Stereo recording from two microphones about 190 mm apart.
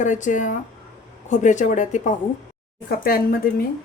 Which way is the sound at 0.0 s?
40° left (ahead or behind).